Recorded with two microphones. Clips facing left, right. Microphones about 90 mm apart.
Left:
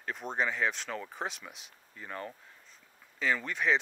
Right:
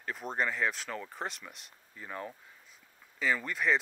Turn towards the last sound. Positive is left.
turn(degrees=0)  # may be behind; listen again after turning